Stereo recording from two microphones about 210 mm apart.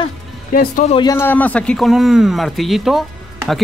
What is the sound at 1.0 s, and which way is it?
A man's voice, 15° left (ahead or behind).